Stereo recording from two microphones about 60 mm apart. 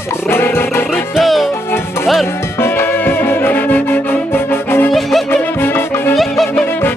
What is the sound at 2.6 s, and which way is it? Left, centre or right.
Music, left.